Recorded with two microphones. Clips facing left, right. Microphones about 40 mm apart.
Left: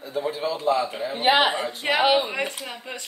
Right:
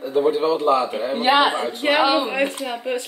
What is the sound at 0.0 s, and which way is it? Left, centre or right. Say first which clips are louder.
Speech: right 8 dB; right.